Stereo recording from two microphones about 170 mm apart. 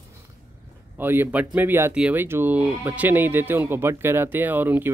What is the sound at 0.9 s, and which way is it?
Speech, 10° right (ahead or behind).